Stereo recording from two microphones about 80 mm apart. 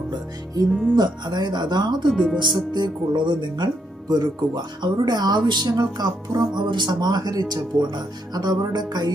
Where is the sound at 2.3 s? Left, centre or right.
Right.